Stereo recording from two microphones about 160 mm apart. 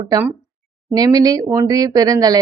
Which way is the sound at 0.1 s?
20° right (ahead or behind).